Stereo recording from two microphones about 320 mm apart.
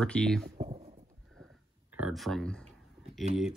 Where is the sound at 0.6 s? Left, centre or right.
Centre.